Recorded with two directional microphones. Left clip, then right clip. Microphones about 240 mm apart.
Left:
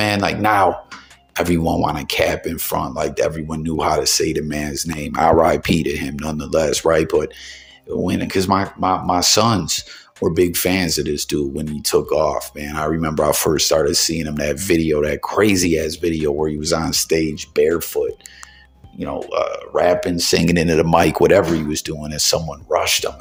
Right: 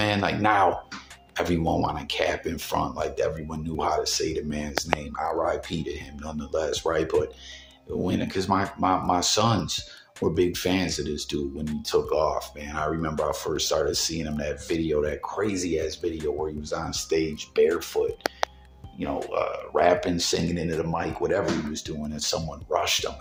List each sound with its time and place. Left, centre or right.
0.0 s speech: left
19.3 s speech: left
20.5 s speech: left